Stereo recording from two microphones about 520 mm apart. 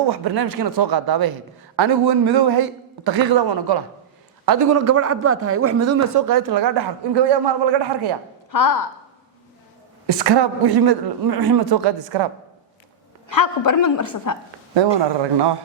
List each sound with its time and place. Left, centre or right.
0.1 s a man's voice: right
4.4 s a man's voice: right
10.1 s a man's voice: right
13.3 s a woman's voice: left
14.8 s a man's voice: right